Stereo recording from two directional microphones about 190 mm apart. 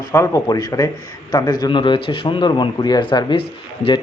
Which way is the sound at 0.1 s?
15° left (ahead or behind).